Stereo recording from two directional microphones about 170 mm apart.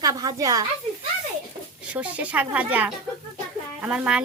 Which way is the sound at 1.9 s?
10° right (ahead or behind).